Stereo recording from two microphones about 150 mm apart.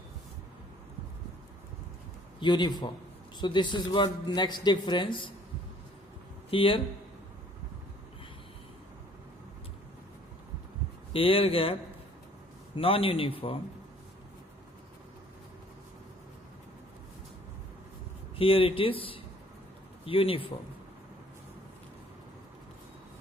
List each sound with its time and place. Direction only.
2.4 s a man's voice: 30° left (ahead or behind)
6.5 s a man's voice: 35° left (ahead or behind)
11.1 s a man's voice: 35° left (ahead or behind)
18.3 s a man's voice: 40° left (ahead or behind)